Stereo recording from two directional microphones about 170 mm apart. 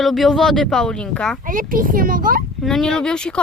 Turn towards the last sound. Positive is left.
turn(degrees=5)  # may be behind; listen again after turning